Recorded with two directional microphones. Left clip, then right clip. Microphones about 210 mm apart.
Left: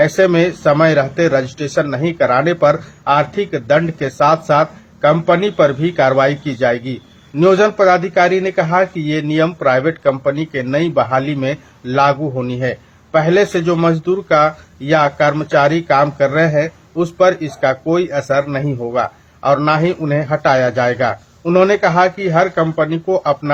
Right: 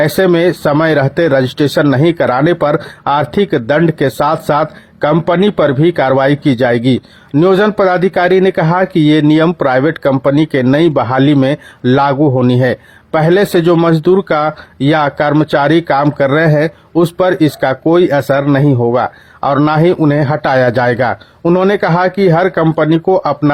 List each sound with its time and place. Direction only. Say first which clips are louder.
0.0 s speech: right 2 dB; 50° right (ahead or behind)